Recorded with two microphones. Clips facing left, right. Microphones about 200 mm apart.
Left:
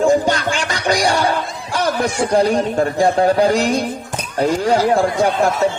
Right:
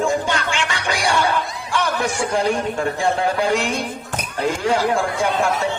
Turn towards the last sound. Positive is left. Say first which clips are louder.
# left 4 dB
turn(degrees=40)  # may be behind; listen again after turning